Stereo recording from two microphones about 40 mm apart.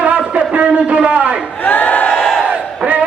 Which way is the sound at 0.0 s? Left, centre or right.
Right.